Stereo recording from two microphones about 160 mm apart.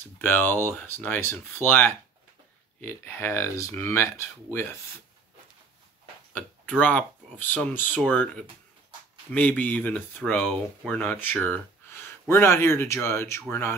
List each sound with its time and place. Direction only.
0.2 s speech: 10° left (ahead or behind)
6.8 s speech: 10° left (ahead or behind)